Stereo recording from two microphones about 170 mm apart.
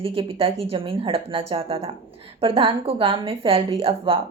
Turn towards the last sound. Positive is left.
turn(degrees=-35)  # may be behind; listen again after turning